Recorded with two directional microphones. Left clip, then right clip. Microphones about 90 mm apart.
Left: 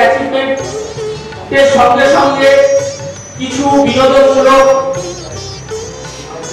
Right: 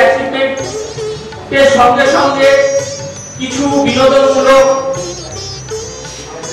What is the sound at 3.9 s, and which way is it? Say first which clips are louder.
Speech: right 1 dB; 5° right (ahead or behind).